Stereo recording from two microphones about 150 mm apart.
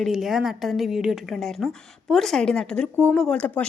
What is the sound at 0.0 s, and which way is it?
A woman's voice, centre (ahead or behind).